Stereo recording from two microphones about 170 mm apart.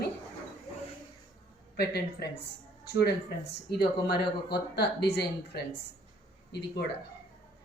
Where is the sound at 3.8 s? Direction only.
75° left (ahead or behind).